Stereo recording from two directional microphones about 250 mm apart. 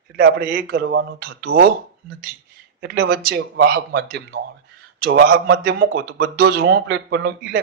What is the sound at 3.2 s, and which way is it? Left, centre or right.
Speech, right.